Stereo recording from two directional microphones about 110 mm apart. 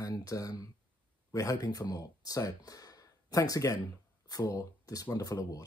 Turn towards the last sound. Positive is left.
turn(degrees=30)  # may be behind; listen again after turning